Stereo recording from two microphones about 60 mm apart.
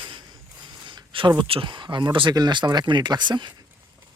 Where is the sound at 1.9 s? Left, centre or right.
Centre.